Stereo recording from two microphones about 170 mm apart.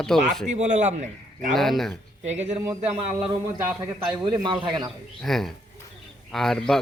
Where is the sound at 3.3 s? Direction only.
20° right (ahead or behind).